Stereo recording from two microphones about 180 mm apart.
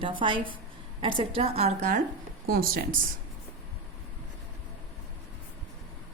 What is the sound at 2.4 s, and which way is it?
Speech, 55° right (ahead or behind).